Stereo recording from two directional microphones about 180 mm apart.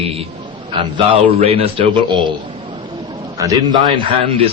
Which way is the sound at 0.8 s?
30° right (ahead or behind).